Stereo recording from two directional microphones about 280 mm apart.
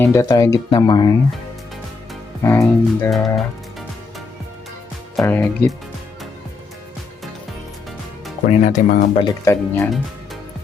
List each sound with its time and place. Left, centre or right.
0.0 s speech: centre
2.4 s speech: centre
5.1 s speech: centre
8.4 s speech: left
9.2 s speech: centre